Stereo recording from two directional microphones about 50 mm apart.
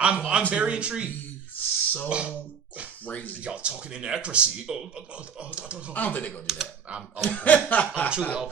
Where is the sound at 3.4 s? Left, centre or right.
Right.